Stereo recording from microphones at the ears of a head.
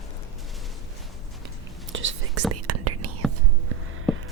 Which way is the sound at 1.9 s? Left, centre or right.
Right.